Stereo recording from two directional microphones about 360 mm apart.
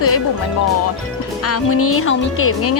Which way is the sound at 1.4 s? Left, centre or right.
Left.